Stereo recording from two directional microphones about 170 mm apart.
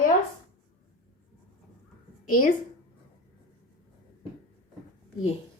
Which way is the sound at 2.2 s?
50° left (ahead or behind).